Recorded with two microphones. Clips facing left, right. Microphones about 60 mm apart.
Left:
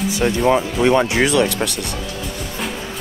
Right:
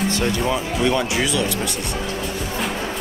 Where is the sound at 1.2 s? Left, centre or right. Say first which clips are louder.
Left 5 dB; left.